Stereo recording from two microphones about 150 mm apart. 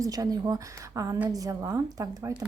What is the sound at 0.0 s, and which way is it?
Speech, 25° right (ahead or behind).